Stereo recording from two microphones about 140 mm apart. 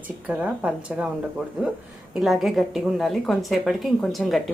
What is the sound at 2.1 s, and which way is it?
A woman's voice, centre (ahead or behind).